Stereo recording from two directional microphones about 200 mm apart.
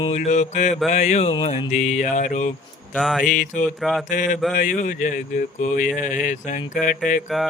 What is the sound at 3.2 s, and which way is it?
Mantra, 40° left (ahead or behind).